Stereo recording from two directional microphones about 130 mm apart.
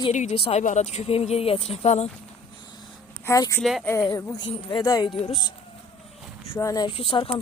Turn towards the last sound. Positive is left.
turn(degrees=45)  # may be behind; listen again after turning